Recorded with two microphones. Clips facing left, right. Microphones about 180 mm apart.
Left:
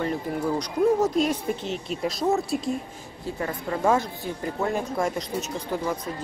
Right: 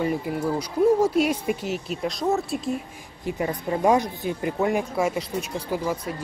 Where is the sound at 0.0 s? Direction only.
10° right (ahead or behind).